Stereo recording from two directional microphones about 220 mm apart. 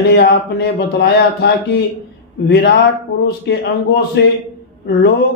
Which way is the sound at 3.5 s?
50° left (ahead or behind).